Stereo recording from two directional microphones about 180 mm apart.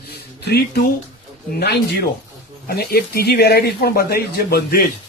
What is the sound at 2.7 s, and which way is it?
Speech, 60° left (ahead or behind).